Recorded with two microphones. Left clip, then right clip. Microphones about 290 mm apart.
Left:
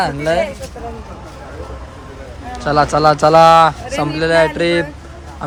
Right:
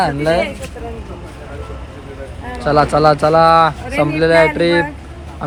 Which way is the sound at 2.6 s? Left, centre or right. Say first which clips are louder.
Right 1 dB; centre.